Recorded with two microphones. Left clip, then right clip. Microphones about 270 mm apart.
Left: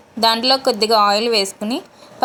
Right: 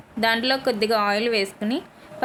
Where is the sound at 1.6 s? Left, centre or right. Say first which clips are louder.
Left 3 dB; centre.